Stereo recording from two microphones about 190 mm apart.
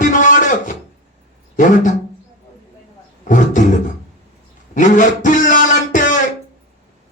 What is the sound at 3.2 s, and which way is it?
Roar, 40° left (ahead or behind).